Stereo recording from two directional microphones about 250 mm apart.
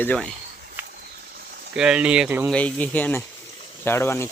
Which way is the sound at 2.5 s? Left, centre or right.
Centre.